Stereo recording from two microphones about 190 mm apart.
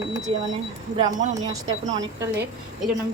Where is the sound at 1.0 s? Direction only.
40° right (ahead or behind).